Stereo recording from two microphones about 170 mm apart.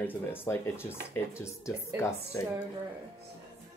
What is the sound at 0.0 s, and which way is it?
Speech, 10° left (ahead or behind).